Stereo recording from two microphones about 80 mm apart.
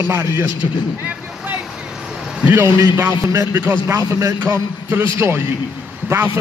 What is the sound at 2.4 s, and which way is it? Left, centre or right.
A man's voice, right.